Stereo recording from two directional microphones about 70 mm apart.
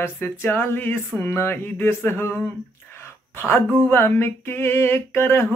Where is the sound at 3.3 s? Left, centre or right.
Left.